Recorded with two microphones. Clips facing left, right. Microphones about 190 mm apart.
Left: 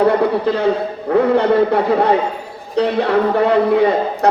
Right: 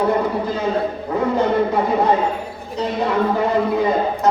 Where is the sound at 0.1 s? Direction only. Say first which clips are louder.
Left 4 dB; 70° left (ahead or behind).